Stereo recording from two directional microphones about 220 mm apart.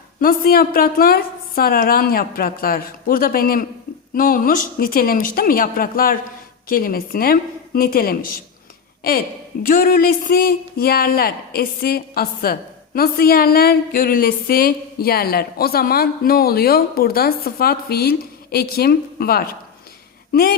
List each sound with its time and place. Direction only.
0.2 s a woman's voice: 40° left (ahead or behind)
9.6 s speech: 40° left (ahead or behind)